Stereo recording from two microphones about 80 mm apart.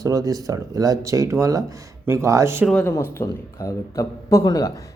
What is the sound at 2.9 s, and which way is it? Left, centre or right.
A man's voice, left.